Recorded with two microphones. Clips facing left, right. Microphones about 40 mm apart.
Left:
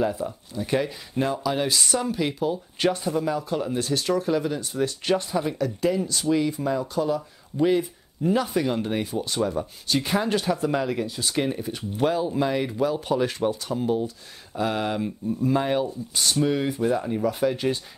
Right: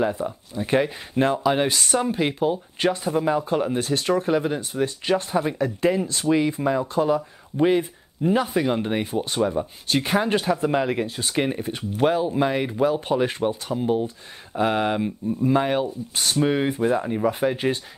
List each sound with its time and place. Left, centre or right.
0.0 s speech: centre
0.6 s speech: right